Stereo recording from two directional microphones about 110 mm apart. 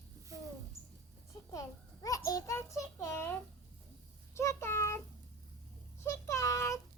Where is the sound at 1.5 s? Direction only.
30° left (ahead or behind).